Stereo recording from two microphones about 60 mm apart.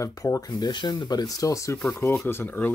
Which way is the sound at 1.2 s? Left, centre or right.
Left.